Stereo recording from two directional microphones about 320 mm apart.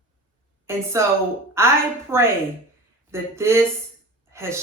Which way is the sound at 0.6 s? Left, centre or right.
Centre.